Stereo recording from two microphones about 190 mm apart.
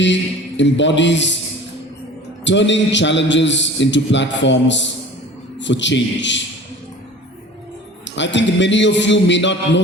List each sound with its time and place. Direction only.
0.0 s a man's voice: 70° left (ahead or behind)
2.4 s a man's voice: 70° left (ahead or behind)
8.0 s a man's voice: 70° left (ahead or behind)